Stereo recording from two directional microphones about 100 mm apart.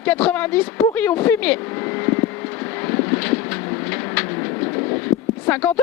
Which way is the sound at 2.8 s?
15° left (ahead or behind).